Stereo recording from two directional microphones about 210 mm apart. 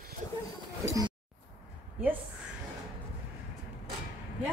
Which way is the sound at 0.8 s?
15° right (ahead or behind).